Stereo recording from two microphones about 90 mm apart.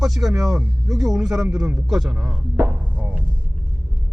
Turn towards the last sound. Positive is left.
turn(degrees=-15)  # may be behind; listen again after turning